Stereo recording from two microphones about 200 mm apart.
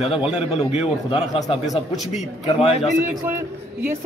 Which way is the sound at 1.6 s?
Centre (ahead or behind).